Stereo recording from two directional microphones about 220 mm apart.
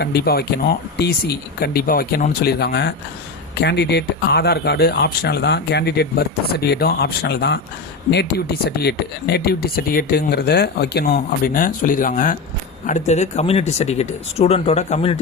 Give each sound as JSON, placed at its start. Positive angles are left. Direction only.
{"t": 0.0, "sound": "speech", "side_deg": 45}